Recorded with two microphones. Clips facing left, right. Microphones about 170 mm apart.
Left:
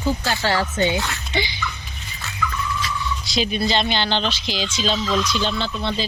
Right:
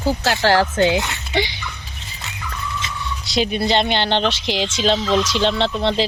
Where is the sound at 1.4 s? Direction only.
70° right (ahead or behind).